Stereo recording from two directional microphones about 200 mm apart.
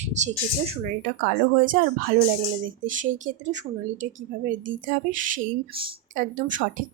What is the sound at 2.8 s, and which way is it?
Speech, 40° right (ahead or behind).